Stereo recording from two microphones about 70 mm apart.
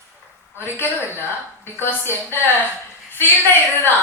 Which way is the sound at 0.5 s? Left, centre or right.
Left.